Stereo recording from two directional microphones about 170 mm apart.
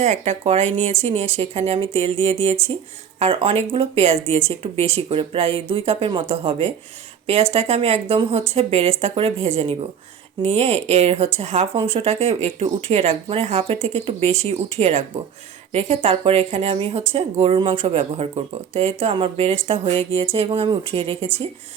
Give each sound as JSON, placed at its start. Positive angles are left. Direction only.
{"t": 0.0, "sound": "speech", "side_deg": -40}